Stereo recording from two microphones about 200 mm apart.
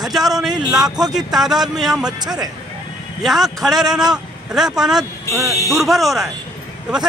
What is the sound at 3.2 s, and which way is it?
Speech, centre (ahead or behind).